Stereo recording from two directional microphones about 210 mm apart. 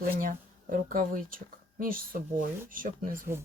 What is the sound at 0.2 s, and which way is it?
A woman's voice, 40° right (ahead or behind).